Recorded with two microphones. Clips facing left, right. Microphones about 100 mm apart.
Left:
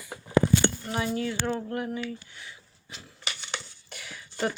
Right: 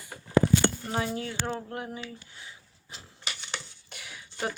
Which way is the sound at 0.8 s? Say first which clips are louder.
Left 2 dB; 30° right (ahead or behind).